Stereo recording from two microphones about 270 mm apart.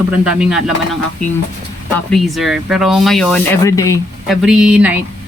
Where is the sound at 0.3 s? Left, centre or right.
Centre.